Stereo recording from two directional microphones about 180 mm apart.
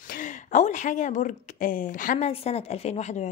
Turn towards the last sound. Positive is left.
turn(degrees=40)  # may be behind; listen again after turning